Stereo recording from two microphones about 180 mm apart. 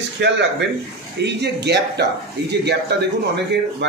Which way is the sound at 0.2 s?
75° right (ahead or behind).